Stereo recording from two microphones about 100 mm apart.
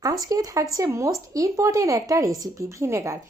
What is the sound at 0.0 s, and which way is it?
Speech, 40° right (ahead or behind).